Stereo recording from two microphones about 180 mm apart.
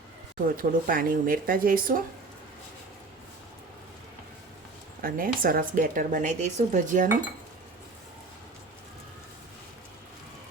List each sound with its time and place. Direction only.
0.5 s speech: 50° right (ahead or behind)
5.0 s speech: 50° right (ahead or behind)